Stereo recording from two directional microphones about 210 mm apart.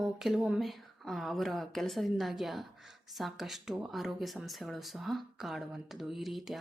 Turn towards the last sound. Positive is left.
turn(degrees=0)  # may be behind; listen again after turning